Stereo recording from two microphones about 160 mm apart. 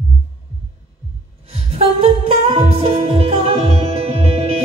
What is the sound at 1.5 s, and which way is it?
Music, 40° right (ahead or behind).